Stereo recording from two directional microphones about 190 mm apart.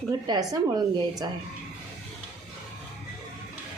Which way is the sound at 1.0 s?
20° right (ahead or behind).